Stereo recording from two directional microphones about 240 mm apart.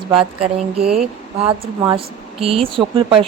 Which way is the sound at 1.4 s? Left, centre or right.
Right.